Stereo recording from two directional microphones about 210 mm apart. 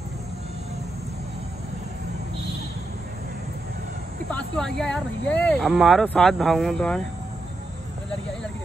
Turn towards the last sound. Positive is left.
turn(degrees=5)  # may be behind; listen again after turning